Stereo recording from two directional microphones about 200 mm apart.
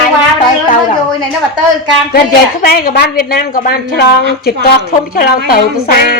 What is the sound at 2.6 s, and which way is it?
A woman's voice, 50° left (ahead or behind).